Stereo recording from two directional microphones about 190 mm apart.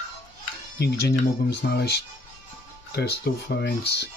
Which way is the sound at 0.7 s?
60° left (ahead or behind).